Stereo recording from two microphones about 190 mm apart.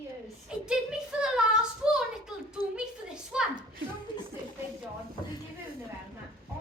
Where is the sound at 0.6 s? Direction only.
5° right (ahead or behind).